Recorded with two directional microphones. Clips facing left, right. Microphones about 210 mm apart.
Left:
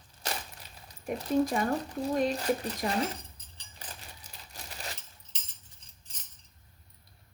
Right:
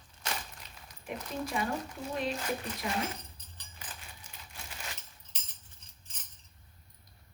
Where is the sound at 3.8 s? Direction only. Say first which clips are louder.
Left 2 dB; 35° left (ahead or behind).